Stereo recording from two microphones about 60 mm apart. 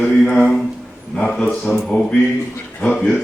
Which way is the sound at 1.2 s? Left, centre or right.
Centre.